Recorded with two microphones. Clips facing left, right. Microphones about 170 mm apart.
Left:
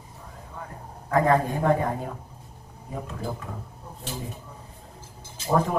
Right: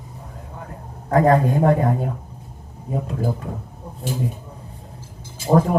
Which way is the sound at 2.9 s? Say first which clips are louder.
Right 8 dB; 35° right (ahead or behind).